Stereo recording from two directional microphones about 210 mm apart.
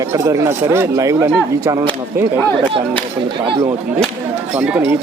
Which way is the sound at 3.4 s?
25° right (ahead or behind).